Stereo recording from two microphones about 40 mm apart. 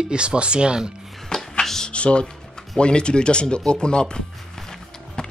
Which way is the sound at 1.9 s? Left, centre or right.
Left.